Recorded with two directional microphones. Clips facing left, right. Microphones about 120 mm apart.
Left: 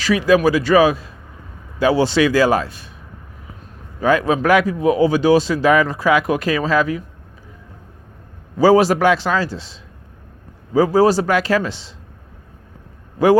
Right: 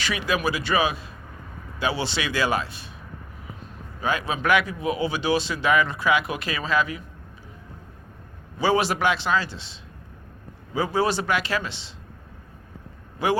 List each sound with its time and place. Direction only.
0.0 s speech: 40° left (ahead or behind)
4.0 s speech: 45° left (ahead or behind)
8.5 s speech: 40° left (ahead or behind)
10.8 s speech: 40° left (ahead or behind)
13.2 s speech: 40° left (ahead or behind)